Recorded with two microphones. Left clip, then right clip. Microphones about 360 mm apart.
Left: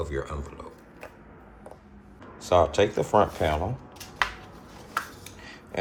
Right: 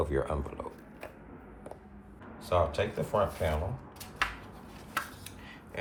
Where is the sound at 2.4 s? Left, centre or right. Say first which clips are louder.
Left 8 dB; centre.